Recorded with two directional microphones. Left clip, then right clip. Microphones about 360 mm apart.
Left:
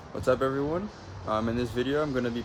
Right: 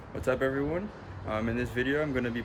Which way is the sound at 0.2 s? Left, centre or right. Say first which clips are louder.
Left 3 dB; centre.